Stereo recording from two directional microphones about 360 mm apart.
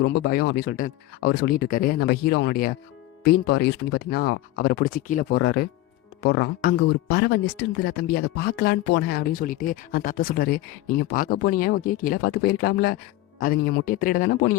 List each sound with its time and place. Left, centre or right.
0.0 s speech: left